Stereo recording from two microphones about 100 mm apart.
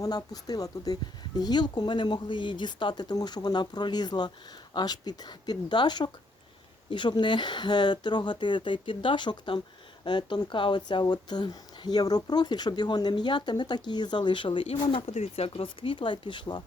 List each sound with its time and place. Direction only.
0.0 s speech: 40° left (ahead or behind)